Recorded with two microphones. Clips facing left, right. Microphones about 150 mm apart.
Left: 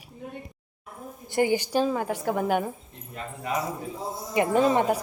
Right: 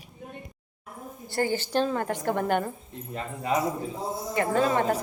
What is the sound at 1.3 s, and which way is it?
A woman's voice, 15° left (ahead or behind).